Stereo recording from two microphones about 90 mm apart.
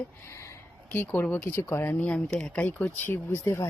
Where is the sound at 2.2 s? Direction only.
10° left (ahead or behind).